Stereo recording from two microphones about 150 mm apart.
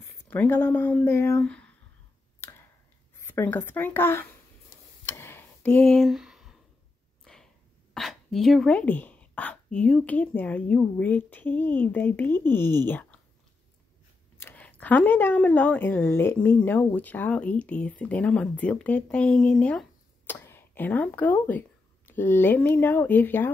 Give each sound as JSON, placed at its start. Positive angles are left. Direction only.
{"t": 0.0, "sound": "speech", "side_deg": 15}
{"t": 2.4, "sound": "a sound", "side_deg": 15}
{"t": 3.2, "sound": "a woman's voice", "side_deg": 15}
{"t": 5.0, "sound": "a sound", "side_deg": 15}
{"t": 7.9, "sound": "speech", "side_deg": 0}
{"t": 14.4, "sound": "speech", "side_deg": 10}